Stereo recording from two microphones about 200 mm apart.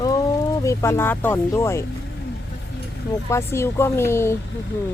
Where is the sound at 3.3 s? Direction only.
10° left (ahead or behind).